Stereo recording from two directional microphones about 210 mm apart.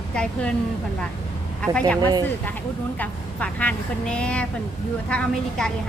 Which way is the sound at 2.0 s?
20° right (ahead or behind).